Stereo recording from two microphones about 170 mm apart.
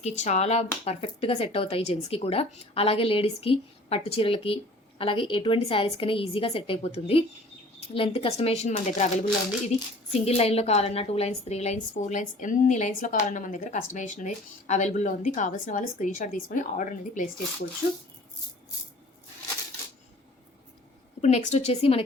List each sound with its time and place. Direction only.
0.0 s a woman's voice: 40° left (ahead or behind)
21.2 s speech: 40° left (ahead or behind)